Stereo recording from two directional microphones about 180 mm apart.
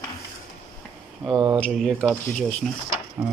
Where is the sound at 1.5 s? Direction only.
5° left (ahead or behind).